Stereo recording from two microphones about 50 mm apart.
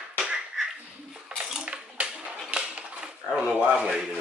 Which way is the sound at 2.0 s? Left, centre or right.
Right.